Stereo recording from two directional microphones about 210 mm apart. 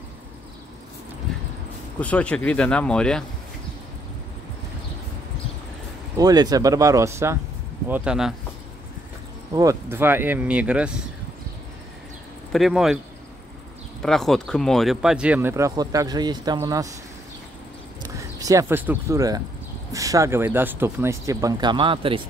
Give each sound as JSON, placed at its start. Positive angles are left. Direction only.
{"t": 2.0, "sound": "speech", "side_deg": 5}
{"t": 6.1, "sound": "speech", "side_deg": -20}
{"t": 9.5, "sound": "speech", "side_deg": -15}
{"t": 12.5, "sound": "speech", "side_deg": 0}
{"t": 14.0, "sound": "speech", "side_deg": 0}
{"t": 18.0, "sound": "speech", "side_deg": -15}